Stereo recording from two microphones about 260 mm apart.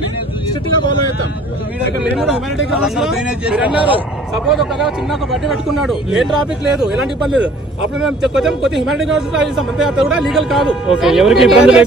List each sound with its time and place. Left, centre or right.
2.8 s a man's voice: centre